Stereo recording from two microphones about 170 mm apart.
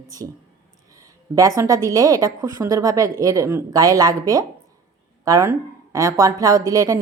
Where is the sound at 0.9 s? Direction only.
20° right (ahead or behind).